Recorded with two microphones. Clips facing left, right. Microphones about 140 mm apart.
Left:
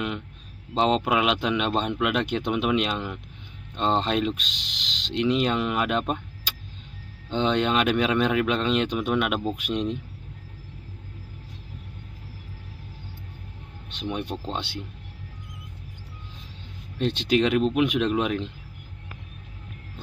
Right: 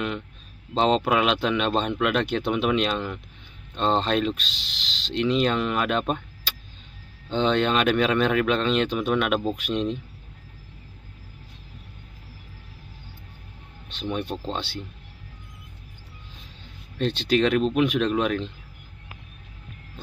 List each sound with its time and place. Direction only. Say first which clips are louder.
0.7 s speech: right 1 dB; 10° left (ahead or behind)
13.8 s speech: right 1 dB; 15° left (ahead or behind)
17.0 s speech: even; 15° left (ahead or behind)